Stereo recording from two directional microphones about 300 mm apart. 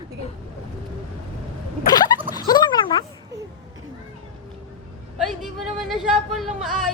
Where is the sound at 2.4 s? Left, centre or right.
Centre.